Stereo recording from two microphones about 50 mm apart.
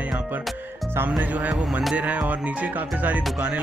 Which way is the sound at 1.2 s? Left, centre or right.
Right.